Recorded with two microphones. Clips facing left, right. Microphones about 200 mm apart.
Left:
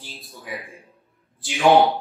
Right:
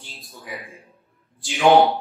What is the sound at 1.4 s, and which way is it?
Speech, centre (ahead or behind).